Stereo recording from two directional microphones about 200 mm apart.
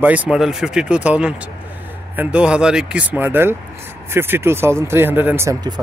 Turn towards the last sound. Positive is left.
turn(degrees=-15)  # may be behind; listen again after turning